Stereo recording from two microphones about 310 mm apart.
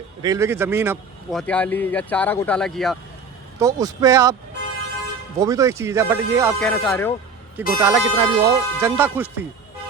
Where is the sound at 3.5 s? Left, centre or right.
Centre.